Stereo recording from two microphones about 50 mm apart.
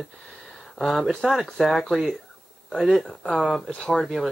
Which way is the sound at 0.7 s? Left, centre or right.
Centre.